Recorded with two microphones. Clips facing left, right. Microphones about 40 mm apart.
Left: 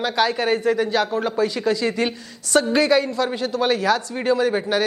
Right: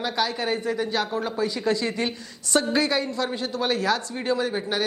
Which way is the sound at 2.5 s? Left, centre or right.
Centre.